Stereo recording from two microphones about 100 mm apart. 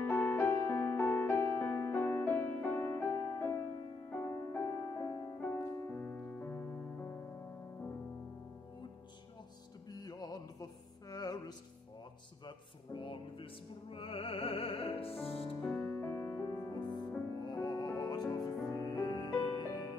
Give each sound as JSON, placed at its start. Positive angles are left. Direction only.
{"t": 0.0, "sound": "music", "side_deg": 20}
{"t": 6.4, "sound": "music", "side_deg": 25}
{"t": 9.8, "sound": "music", "side_deg": 40}
{"t": 12.4, "sound": "music", "side_deg": 55}
{"t": 15.7, "sound": "music", "side_deg": 20}
{"t": 16.7, "sound": "music", "side_deg": 45}